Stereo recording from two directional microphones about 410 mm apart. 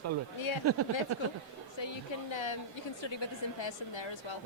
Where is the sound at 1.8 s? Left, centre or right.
Left.